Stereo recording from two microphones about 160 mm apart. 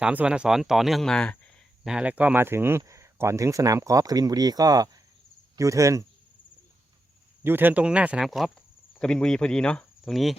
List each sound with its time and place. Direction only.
0.0 s speech: 5° right (ahead or behind)
1.8 s speech: 5° right (ahead or behind)
7.4 s speech: 10° right (ahead or behind)